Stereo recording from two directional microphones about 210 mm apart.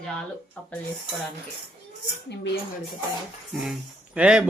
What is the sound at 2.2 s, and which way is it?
Speech, 55° left (ahead or behind).